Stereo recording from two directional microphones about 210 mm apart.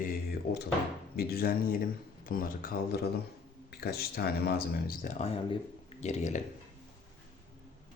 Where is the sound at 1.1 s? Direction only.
45° left (ahead or behind).